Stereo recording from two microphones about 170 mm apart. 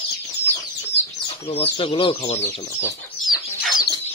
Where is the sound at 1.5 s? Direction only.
35° left (ahead or behind).